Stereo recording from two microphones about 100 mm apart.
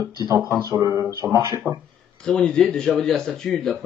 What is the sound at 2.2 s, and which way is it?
Speech, 10° left (ahead or behind).